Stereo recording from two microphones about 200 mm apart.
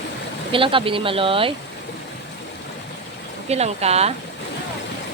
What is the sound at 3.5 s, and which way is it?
Speech, 30° right (ahead or behind).